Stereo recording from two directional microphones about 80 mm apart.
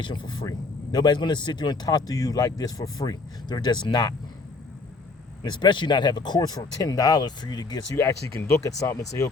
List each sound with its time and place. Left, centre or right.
0.0 s a man's voice: left
5.4 s a man's voice: left
7.9 s speech: left